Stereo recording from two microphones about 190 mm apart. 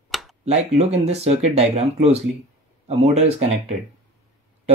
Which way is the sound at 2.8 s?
35° right (ahead or behind).